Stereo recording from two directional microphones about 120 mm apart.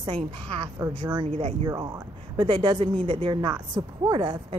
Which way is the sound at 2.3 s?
45° right (ahead or behind).